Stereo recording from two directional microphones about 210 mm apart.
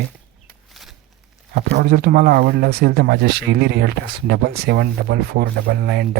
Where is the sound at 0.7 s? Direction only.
Centre (ahead or behind).